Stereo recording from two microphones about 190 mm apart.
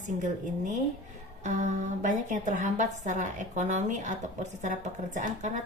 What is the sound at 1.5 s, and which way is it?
A woman's voice, 40° right (ahead or behind).